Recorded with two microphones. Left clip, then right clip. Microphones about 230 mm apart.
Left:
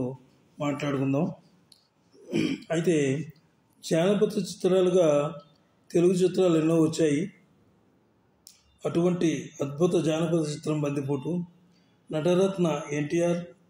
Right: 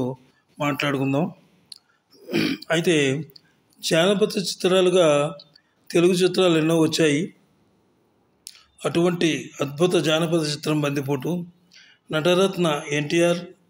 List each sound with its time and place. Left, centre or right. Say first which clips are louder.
0.6 s a man's voice: right 6 dB; right
1.7 s a sound: right 15 dB; right
2.2 s a man's voice: right 5 dB; centre
8.5 s a man's voice: right 5 dB; right